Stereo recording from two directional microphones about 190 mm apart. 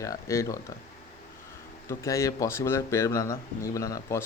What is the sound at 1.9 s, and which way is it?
Speech, 15° left (ahead or behind).